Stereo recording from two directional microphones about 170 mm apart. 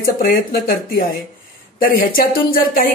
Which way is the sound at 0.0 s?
60° left (ahead or behind).